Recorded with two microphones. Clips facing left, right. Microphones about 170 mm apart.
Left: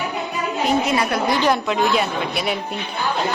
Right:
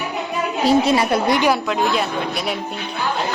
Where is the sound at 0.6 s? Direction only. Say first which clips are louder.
Right 4 dB; 35° right (ahead or behind).